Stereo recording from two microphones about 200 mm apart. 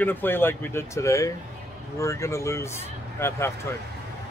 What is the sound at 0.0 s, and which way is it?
Speech, 10° left (ahead or behind).